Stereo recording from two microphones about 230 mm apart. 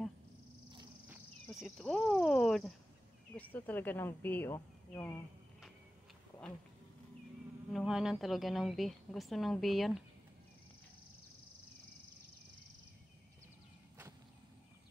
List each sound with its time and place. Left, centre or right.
0.7 s cricket: centre
1.1 s cricket: centre
3.3 s speech: centre
7.7 s a woman's voice: centre